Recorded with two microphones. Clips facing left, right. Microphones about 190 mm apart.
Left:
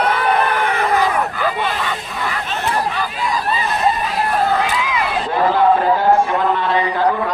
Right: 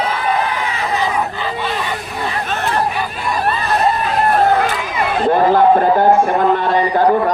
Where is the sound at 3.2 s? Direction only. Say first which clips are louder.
Right 2 dB; 60° right (ahead or behind).